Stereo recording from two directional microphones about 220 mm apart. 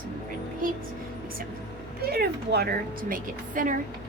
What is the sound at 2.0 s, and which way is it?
A woman's voice, 45° right (ahead or behind).